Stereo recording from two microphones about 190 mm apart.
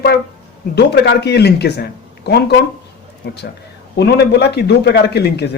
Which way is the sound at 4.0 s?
60° left (ahead or behind).